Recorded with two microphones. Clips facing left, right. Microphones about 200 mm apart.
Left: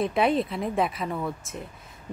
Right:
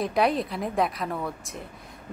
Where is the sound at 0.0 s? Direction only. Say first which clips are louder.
Left 1 dB; centre (ahead or behind).